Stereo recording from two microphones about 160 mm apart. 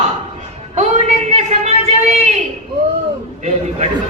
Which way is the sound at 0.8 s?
45° right (ahead or behind).